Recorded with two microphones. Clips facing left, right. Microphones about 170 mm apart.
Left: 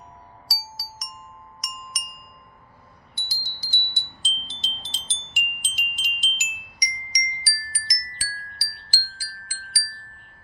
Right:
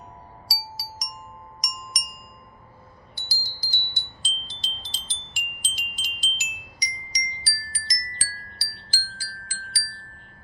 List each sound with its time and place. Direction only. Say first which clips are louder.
0.5 s music: right 3 dB; centre (ahead or behind)
1.6 s glass: left 1 dB; 5° left (ahead or behind)
3.2 s wind chime: right 1 dB; 25° left (ahead or behind)
8.6 s chime: even; 10° left (ahead or behind)
9.2 s wind chime: right 2 dB; 10° left (ahead or behind)